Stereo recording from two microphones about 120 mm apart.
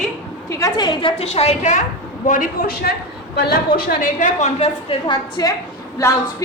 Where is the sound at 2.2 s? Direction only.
90° left.